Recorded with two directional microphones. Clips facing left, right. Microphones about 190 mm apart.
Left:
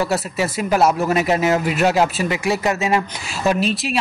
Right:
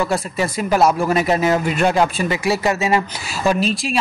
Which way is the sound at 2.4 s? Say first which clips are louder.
Right 2 dB; 35° right (ahead or behind).